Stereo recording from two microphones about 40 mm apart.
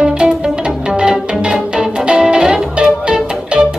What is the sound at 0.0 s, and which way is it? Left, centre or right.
Music, centre.